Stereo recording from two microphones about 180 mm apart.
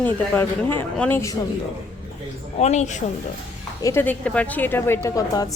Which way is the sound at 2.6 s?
40° left (ahead or behind).